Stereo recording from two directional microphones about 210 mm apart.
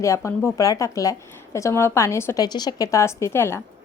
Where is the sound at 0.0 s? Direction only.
15° left (ahead or behind).